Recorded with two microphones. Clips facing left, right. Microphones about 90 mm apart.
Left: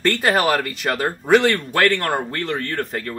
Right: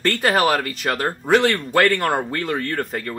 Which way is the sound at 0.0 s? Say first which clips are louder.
Even; centre (ahead or behind).